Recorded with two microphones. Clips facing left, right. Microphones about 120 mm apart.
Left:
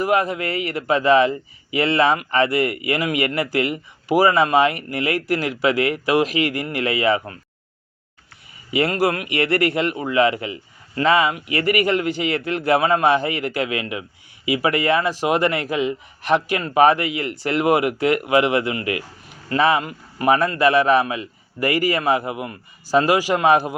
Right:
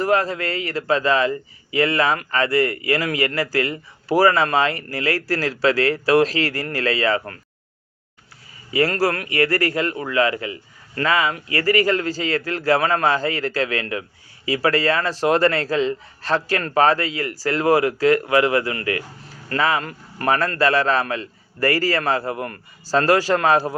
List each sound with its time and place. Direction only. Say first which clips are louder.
0.0 s a man's voice: even; 15° left (ahead or behind)
8.7 s a man's voice: even; 20° left (ahead or behind)
19.8 s a man's voice: left 3 dB; 10° left (ahead or behind)